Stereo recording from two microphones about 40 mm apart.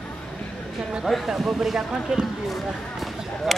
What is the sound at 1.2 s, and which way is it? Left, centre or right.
Speech, centre.